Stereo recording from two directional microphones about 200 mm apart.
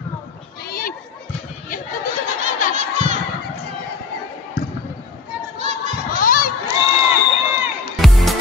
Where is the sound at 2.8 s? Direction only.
40° right (ahead or behind).